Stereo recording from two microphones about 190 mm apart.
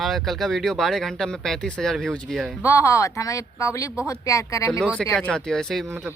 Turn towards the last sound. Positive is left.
turn(degrees=-10)  # may be behind; listen again after turning